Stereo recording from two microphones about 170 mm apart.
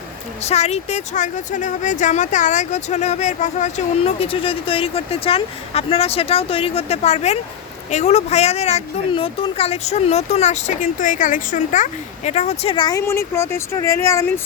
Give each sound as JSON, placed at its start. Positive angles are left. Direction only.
{"t": 0.4, "sound": "speech", "side_deg": 40}
{"t": 12.7, "sound": "speech", "side_deg": 25}
{"t": 13.1, "sound": "speech", "side_deg": 15}